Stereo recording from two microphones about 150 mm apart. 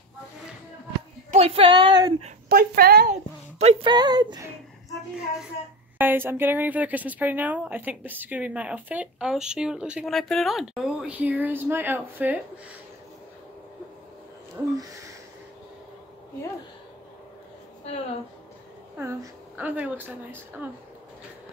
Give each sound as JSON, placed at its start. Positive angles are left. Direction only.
{"t": 1.3, "sound": "a sound", "side_deg": -40}
{"t": 2.5, "sound": "a woman's voice", "side_deg": -80}
{"t": 3.1, "sound": "a sound", "side_deg": -50}
{"t": 3.8, "sound": "speech", "side_deg": -30}
{"t": 5.9, "sound": "a woman's voice", "side_deg": -15}
{"t": 14.6, "sound": "a woman's voice", "side_deg": -15}
{"t": 18.9, "sound": "a woman's voice", "side_deg": -15}